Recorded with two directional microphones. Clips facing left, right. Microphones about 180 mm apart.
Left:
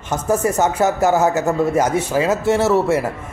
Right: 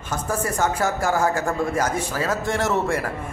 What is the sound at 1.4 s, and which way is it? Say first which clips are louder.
A man's voice: left 6 dB; 5° left (ahead or behind).